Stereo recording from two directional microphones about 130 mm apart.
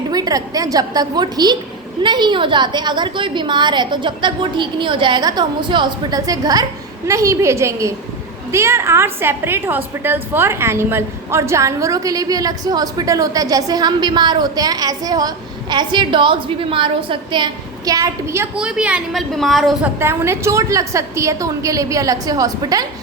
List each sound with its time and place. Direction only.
0.1 s a woman's voice: 30° right (ahead or behind)
18.5 s a woman's voice: 5° right (ahead or behind)
19.8 s a woman's voice: 20° right (ahead or behind)